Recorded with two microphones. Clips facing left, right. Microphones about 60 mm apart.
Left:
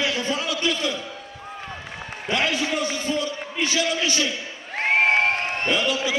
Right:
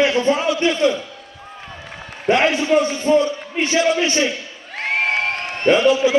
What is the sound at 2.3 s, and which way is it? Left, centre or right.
A man's voice, right.